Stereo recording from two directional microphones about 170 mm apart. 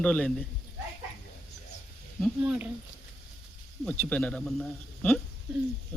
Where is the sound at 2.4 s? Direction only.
10° right (ahead or behind).